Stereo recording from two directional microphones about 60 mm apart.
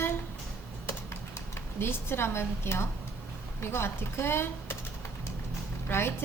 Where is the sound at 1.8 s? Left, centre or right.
Left.